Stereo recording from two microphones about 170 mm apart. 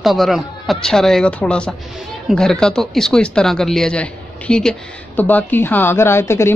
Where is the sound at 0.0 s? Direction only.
Centre (ahead or behind).